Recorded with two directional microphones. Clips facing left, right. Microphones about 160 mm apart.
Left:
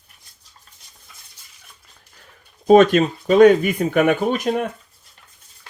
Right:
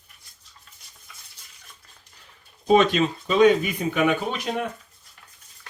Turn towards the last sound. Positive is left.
turn(degrees=50)  # may be behind; listen again after turning